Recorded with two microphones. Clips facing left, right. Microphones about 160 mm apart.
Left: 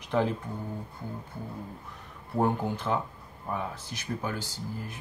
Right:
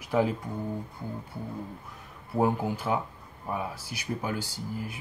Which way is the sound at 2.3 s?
5° right (ahead or behind).